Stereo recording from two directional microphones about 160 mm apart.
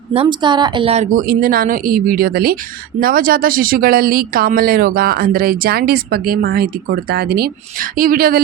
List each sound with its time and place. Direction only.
0.1 s a woman's voice: 35° right (ahead or behind)
1.1 s speech: 65° right (ahead or behind)
3.0 s speech: 65° right (ahead or behind)